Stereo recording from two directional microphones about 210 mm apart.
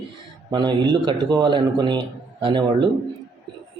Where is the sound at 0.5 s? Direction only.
20° right (ahead or behind).